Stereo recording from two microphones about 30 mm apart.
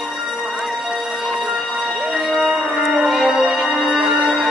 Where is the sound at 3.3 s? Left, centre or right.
Right.